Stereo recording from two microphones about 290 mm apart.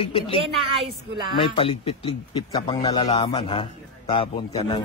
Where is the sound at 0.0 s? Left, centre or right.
Centre.